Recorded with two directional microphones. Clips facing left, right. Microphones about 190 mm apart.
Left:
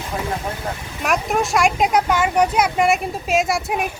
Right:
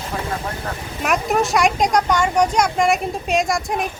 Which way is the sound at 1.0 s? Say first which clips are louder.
Right 1 dB; centre (ahead or behind).